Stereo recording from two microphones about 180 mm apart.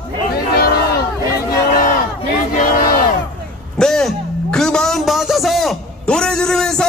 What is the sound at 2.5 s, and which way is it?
Battle cry, 50° left (ahead or behind).